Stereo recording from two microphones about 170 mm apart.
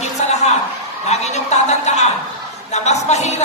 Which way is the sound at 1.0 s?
40° left (ahead or behind).